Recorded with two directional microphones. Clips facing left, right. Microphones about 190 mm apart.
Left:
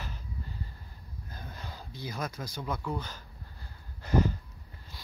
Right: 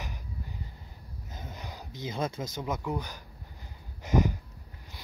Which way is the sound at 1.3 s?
20° right (ahead or behind).